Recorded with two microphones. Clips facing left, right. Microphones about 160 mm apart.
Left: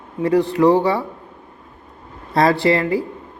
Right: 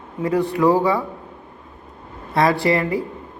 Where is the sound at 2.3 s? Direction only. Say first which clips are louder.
Left 2 dB; 30° left (ahead or behind).